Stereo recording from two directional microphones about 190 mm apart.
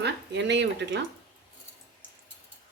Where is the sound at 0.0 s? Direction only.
65° right (ahead or behind).